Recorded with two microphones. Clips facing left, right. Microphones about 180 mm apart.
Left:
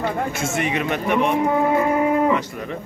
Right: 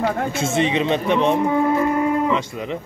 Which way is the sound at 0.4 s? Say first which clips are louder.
Right 3 dB; 25° right (ahead or behind).